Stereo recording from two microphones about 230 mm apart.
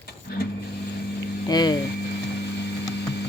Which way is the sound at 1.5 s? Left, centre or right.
Centre.